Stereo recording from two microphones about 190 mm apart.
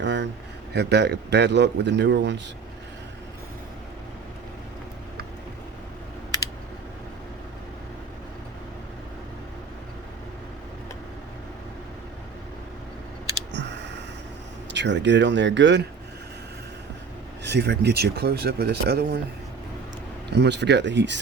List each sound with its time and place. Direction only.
0.0 s a sound: 70° right (ahead or behind)
0.7 s speech: 60° right (ahead or behind)
13.5 s a sound: 65° right (ahead or behind)
14.7 s speech: 70° right (ahead or behind)
17.4 s speech: 65° right (ahead or behind)
20.3 s speech: 65° right (ahead or behind)